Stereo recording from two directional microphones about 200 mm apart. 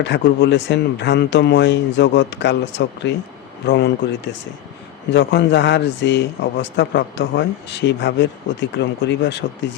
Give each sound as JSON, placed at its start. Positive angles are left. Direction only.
{"t": 0.0, "sound": "speech", "side_deg": 60}